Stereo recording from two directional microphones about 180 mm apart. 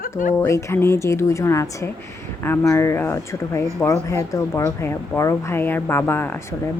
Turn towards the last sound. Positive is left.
turn(degrees=10)  # may be behind; listen again after turning